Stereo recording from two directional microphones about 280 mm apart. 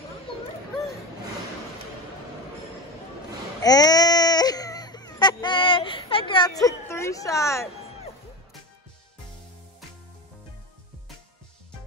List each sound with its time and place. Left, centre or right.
3.6 s speech: centre